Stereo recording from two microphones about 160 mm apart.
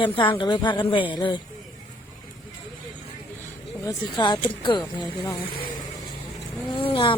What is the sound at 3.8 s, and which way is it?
A woman's voice, 25° left (ahead or behind).